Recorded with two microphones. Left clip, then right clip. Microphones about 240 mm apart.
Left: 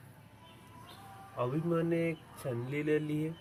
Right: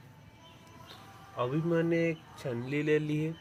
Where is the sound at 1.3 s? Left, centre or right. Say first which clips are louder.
Right 3 dB; right.